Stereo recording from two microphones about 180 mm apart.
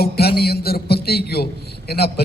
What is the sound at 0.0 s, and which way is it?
A man's voice, 60° left (ahead or behind).